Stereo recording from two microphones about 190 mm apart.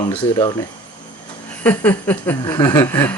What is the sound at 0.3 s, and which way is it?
Speech, 20° left (ahead or behind).